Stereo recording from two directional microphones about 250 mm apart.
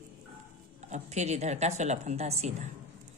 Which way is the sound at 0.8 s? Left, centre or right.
Right.